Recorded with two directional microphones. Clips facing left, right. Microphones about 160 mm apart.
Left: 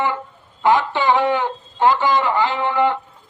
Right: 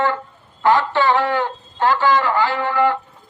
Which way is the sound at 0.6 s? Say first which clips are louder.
Right 1 dB; 15° left (ahead or behind).